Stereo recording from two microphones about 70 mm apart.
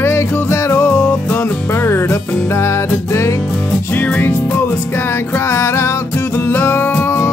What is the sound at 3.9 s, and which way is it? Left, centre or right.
Music, left.